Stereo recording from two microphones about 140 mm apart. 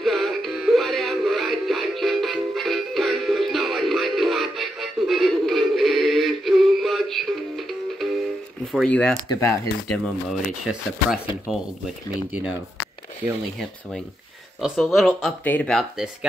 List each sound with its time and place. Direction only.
0.0 s music: centre (ahead or behind)
8.8 s speech: 5° left (ahead or behind)
9.3 s speech: 20° left (ahead or behind)
10.6 s speech: 5° right (ahead or behind)
14.6 s speech: centre (ahead or behind)